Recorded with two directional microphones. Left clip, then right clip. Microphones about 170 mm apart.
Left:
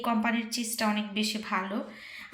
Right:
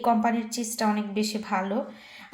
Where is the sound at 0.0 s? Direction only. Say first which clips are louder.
Right 5 dB; 45° right (ahead or behind).